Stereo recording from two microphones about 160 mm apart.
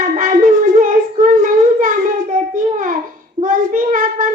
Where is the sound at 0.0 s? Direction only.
55° right (ahead or behind).